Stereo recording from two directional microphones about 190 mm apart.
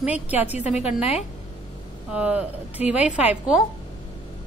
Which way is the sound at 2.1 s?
5° right (ahead or behind).